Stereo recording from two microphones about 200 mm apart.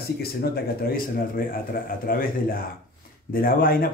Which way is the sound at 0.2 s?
50° left (ahead or behind).